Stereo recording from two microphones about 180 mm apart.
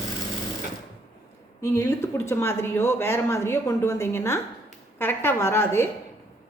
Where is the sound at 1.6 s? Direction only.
15° left (ahead or behind).